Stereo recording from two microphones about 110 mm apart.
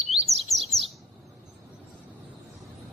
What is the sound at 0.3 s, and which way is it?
Chirp, 70° right (ahead or behind).